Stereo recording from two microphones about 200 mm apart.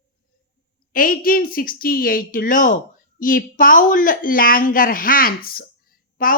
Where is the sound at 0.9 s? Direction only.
45° left (ahead or behind).